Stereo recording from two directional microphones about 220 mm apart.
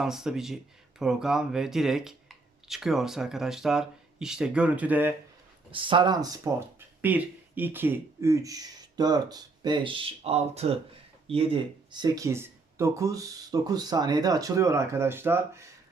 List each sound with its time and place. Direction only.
0.0 s speech: centre (ahead or behind)
5.7 s speech: 20° right (ahead or behind)